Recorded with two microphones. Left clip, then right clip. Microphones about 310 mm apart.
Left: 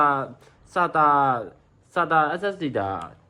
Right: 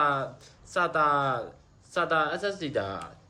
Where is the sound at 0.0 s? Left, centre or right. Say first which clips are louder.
Left 5 dB; centre.